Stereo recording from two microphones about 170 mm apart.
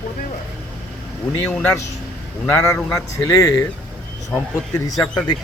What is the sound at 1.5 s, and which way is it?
Speech, 5° left (ahead or behind).